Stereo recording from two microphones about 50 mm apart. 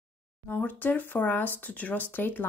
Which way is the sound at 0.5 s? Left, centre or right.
Left.